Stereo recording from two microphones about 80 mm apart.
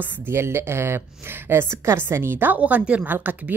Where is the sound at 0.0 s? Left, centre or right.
Right.